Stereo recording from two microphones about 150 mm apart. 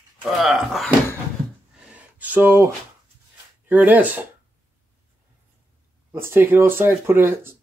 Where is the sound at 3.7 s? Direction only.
10° right (ahead or behind).